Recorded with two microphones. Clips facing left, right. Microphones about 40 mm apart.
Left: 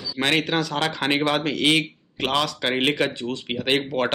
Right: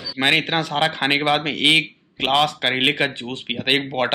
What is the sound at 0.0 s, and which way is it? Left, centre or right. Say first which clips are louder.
Speech: right 3 dB; right.